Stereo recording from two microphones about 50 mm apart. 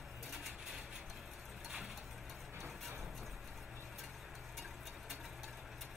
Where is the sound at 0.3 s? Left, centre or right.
Centre.